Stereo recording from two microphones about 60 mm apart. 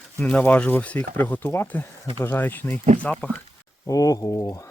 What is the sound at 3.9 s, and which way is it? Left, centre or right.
Speech, left.